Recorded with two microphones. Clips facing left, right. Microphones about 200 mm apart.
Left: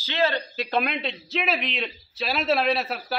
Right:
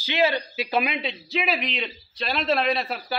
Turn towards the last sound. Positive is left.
turn(degrees=0)  # may be behind; listen again after turning